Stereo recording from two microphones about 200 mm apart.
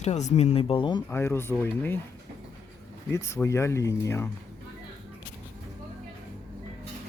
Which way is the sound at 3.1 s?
15° left (ahead or behind).